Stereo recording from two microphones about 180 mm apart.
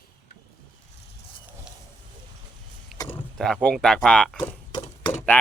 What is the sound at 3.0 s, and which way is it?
Speech, 10° left (ahead or behind).